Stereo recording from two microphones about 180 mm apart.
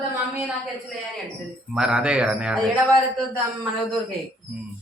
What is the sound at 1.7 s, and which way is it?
Speech, 5° right (ahead or behind).